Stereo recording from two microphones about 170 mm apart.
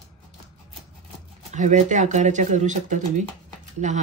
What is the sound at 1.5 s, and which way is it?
Speech, 45° right (ahead or behind).